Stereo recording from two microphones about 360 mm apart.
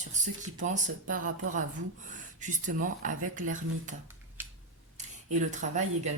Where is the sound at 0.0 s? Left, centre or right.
Centre.